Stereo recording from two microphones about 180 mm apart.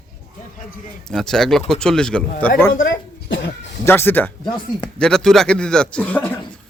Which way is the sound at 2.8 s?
85° left.